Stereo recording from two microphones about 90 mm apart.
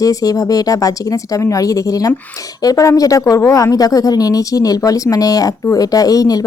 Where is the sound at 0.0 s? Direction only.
40° left (ahead or behind).